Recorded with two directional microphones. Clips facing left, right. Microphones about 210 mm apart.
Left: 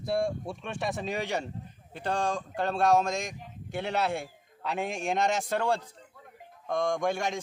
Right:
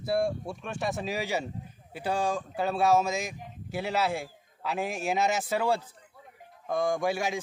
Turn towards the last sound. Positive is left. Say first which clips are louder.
# right 1 dB
turn(degrees=-5)  # may be behind; listen again after turning